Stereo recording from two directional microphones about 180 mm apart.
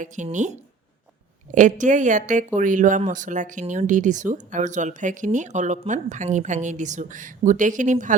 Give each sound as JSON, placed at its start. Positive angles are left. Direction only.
{"t": 0.0, "sound": "speech", "side_deg": -40}